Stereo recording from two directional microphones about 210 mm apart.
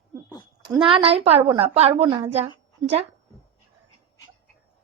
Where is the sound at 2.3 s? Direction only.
30° right (ahead or behind).